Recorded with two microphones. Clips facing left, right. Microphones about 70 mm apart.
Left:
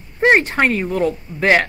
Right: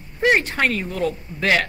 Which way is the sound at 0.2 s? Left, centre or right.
Left.